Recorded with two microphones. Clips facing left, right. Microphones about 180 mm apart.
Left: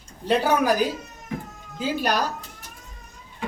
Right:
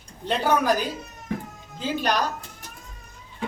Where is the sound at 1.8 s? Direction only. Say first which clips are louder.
Left 1 dB; 10° left (ahead or behind).